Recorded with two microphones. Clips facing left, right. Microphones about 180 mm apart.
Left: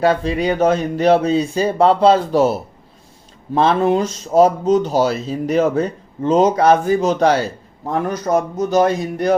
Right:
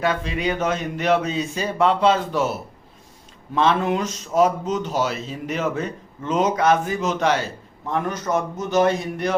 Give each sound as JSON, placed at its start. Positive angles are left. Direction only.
{"t": 0.0, "sound": "speech", "side_deg": 35}